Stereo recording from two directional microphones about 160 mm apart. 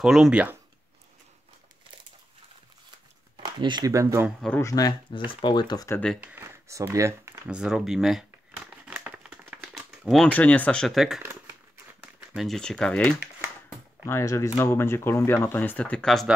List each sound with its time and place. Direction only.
0.0 s speech: 5° right (ahead or behind)
3.3 s speech: 30° right (ahead or behind)
4.6 s speech: 20° left (ahead or behind)
6.2 s speech: 15° right (ahead or behind)
7.4 s crumpling: 5° right (ahead or behind)
9.6 s typewriter: centre (ahead or behind)
10.2 s speech: 10° left (ahead or behind)
11.2 s crumpling: 15° right (ahead or behind)
12.0 s speech: centre (ahead or behind)